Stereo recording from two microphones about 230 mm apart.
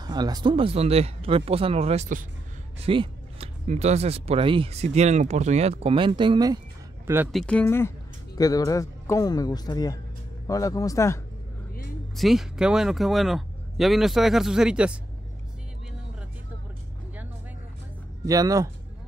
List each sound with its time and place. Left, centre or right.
0.0 s speech: centre
7.3 s speech: centre
12.2 s speech: centre
18.2 s speech: centre